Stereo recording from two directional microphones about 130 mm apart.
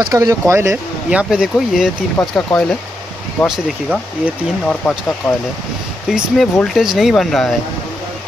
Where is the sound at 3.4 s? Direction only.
5° right (ahead or behind).